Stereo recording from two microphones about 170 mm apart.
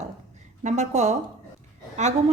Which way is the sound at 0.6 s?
45° right (ahead or behind).